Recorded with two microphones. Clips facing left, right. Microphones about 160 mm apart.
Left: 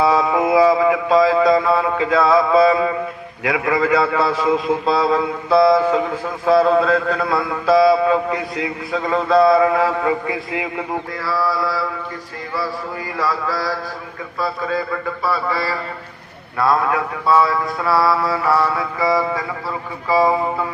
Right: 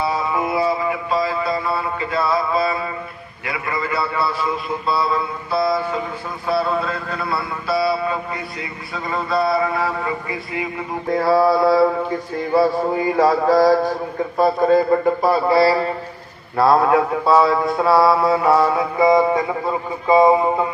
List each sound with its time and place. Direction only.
0.0 s a sound: 90° left
3.4 s speech: 90° left
11.2 s a man's voice: 55° right (ahead or behind); by 15.8 s 35° right (ahead or behind)
16.6 s mantra: 30° right (ahead or behind)